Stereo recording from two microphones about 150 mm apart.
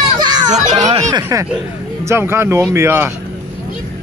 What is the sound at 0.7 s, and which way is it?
Speech, 25° right (ahead or behind).